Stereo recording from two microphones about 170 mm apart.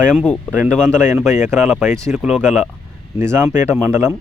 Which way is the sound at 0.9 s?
15° right (ahead or behind).